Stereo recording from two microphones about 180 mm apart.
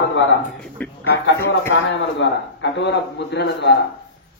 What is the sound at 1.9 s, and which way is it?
A man's voice, 85° left.